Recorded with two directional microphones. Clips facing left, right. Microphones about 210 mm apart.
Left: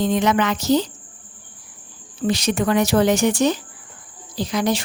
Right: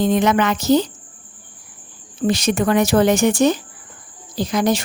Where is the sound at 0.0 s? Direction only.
50° right (ahead or behind).